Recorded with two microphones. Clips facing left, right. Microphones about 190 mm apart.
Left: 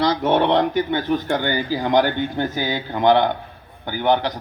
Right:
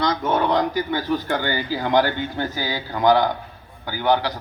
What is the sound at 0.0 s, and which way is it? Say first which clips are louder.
A man's voice: left 3 dB; 30° left (ahead or behind).